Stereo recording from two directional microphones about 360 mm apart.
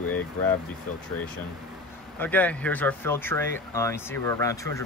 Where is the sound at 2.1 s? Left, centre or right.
Centre.